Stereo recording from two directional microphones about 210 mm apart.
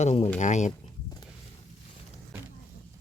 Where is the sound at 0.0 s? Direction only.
30° left (ahead or behind).